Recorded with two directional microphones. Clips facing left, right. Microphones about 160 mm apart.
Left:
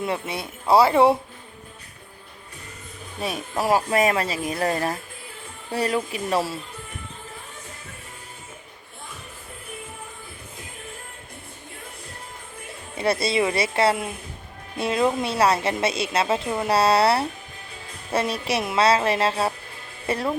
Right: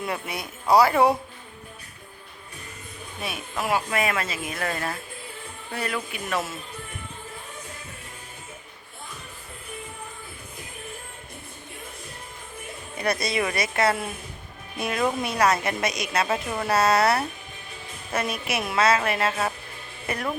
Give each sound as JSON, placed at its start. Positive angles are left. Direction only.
{"t": 0.0, "sound": "speech", "side_deg": 25}
{"t": 3.2, "sound": "speech", "side_deg": 40}
{"t": 13.0, "sound": "speech", "side_deg": 25}